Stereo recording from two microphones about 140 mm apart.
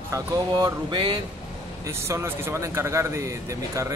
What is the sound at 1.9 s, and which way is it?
Speech, 20° right (ahead or behind).